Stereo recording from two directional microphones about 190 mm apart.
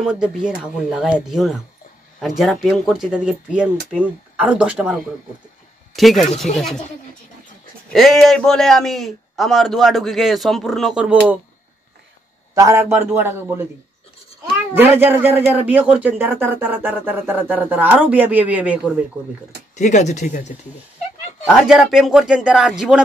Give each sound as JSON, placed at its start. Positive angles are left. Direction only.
{"t": 0.0, "sound": "a man's voice", "side_deg": -5}
{"t": 7.9, "sound": "a man's voice", "side_deg": 0}
{"t": 12.5, "sound": "a man's voice", "side_deg": -15}
{"t": 14.7, "sound": "a man's voice", "side_deg": -10}
{"t": 19.7, "sound": "speech", "side_deg": 40}
{"t": 21.5, "sound": "a man's voice", "side_deg": -5}